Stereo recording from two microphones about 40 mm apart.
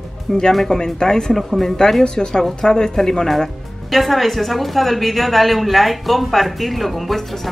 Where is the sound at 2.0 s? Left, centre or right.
Centre.